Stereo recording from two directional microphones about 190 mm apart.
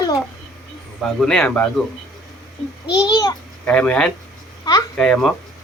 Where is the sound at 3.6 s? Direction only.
5° left (ahead or behind).